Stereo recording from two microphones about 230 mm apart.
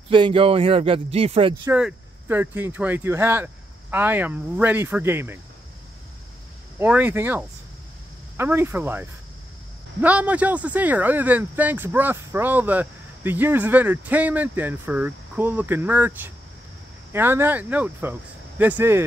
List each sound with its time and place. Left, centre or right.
0.1 s speech: right
1.7 s speech: centre
6.8 s speech: centre
10.0 s speech: centre